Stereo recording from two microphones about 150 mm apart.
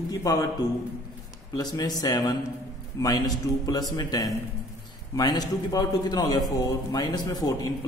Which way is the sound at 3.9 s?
25° left (ahead or behind).